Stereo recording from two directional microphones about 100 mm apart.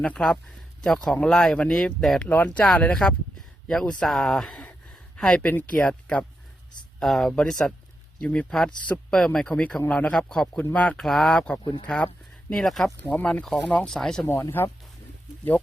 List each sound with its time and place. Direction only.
0.0 s speech: 10° left (ahead or behind)
11.0 s speech: centre (ahead or behind)
13.0 s speech: 15° left (ahead or behind)
13.4 s speech: centre (ahead or behind)
14.6 s speech: 20° left (ahead or behind)